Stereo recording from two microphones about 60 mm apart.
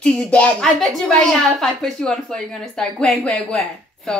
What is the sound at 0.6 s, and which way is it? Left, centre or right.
A woman's voice, centre.